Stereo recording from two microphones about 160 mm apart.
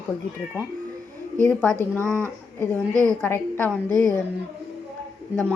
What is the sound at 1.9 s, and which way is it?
A woman's voice, 15° right (ahead or behind).